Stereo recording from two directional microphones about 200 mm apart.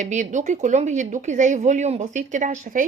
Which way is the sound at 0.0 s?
40° right (ahead or behind).